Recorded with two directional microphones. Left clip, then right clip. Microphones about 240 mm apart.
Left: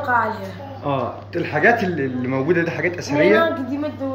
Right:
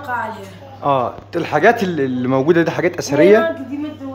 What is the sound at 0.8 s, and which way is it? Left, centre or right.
A man's voice, centre.